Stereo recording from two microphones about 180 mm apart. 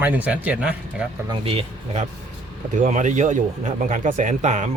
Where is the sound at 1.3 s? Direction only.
30° right (ahead or behind).